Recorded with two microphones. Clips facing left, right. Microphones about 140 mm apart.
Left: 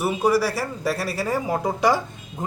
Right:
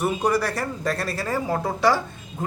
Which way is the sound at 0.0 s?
10° left (ahead or behind).